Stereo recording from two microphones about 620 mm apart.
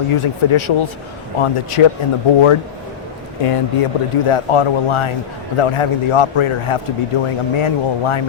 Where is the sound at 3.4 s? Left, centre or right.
Left.